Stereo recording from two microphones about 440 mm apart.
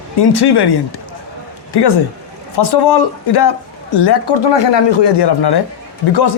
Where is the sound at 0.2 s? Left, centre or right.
Left.